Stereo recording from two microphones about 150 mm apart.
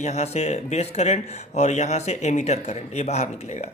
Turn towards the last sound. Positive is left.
turn(degrees=50)  # may be behind; listen again after turning